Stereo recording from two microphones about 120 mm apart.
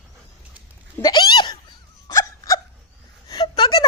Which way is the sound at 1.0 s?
35° left (ahead or behind).